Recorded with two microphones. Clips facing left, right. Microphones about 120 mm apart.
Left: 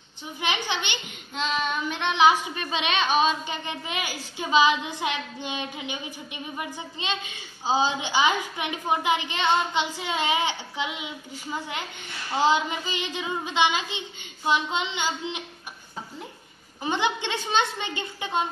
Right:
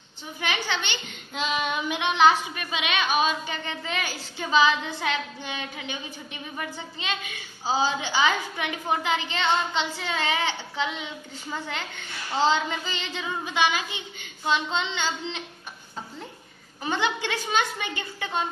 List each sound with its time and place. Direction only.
0.4 s a woman's voice: 20° left (ahead or behind)
1.3 s child singing: 10° right (ahead or behind)
2.4 s a woman's voice: 30° left (ahead or behind); by 15.4 s 15° left (ahead or behind)
16.8 s a woman's voice: 20° left (ahead or behind)